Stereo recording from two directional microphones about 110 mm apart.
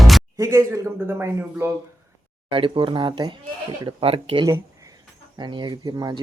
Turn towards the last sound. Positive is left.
turn(degrees=-40)  # may be behind; listen again after turning